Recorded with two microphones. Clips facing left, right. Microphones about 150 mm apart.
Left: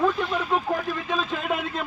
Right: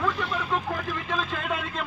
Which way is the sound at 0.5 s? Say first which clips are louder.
Left 4 dB; 15° left (ahead or behind).